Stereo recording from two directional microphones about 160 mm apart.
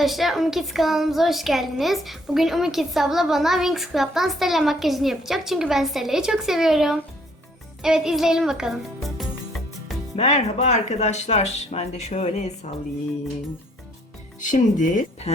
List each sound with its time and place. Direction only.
0.0 s a child's voice: centre (ahead or behind)
10.2 s speech: 45° left (ahead or behind)
14.5 s speech: 55° left (ahead or behind)